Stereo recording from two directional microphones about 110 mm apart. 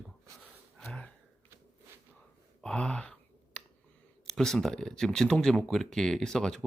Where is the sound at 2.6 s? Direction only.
5° left (ahead or behind).